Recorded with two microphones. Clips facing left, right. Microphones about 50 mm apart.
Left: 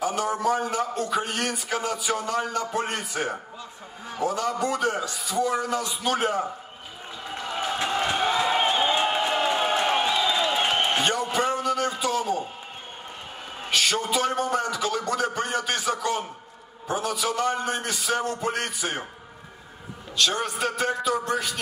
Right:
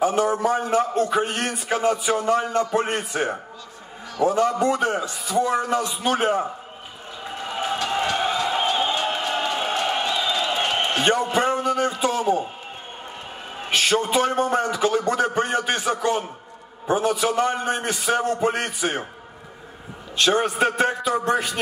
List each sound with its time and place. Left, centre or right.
0.0 s a man's voice: right
7.2 s a sound: centre
8.3 s a sound: left
11.0 s a man's voice: right
13.7 s a man's voice: right
20.2 s a man's voice: right